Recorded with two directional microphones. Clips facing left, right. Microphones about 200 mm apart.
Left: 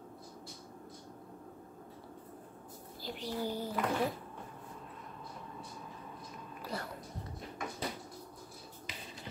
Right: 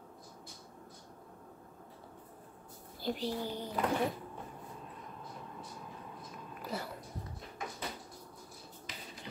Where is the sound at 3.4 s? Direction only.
10° left (ahead or behind).